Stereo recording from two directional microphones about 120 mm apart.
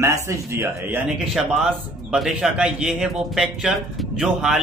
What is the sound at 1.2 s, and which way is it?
A man's voice, 5° right (ahead or behind).